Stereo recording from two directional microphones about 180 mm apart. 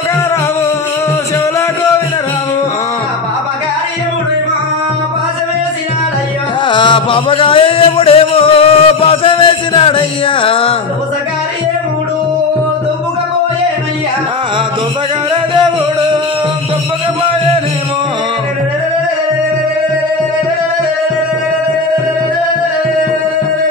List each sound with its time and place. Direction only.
6.7 s music: 25° left (ahead or behind)